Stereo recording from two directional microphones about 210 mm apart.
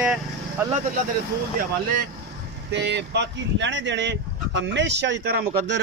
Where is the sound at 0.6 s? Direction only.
10° right (ahead or behind).